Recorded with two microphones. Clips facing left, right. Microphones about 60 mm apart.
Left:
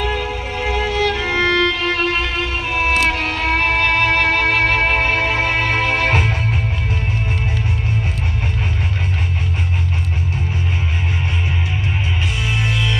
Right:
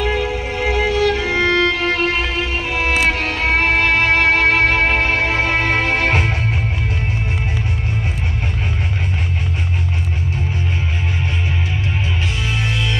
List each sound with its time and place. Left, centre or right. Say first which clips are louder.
0.0 s music: right 2 dB; left
1.3 s violin: even; right
3.1 s music: right 1 dB; right